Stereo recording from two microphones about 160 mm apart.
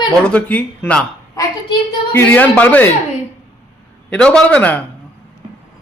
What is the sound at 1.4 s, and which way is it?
A woman's voice, 20° left (ahead or behind).